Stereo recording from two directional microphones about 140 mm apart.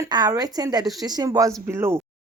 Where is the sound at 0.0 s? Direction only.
30° right (ahead or behind).